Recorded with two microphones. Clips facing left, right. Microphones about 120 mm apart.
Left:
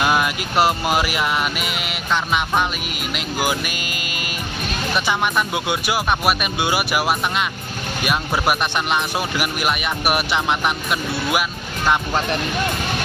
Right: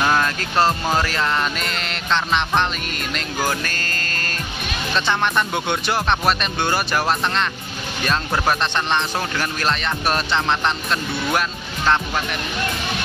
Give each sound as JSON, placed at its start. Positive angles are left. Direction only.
{"t": 0.0, "sound": "speech", "side_deg": 10}